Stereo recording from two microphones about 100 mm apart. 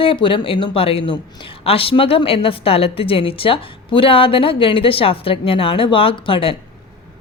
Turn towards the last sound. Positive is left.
turn(degrees=60)  # may be behind; listen again after turning